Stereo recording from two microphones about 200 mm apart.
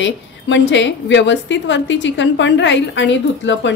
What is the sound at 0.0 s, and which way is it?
A woman's voice, 65° left (ahead or behind).